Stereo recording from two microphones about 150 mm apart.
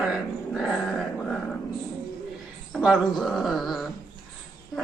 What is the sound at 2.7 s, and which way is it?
A man's voice, centre (ahead or behind).